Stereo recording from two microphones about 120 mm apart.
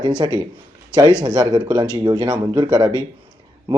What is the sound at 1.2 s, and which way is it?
Speech, 35° right (ahead or behind).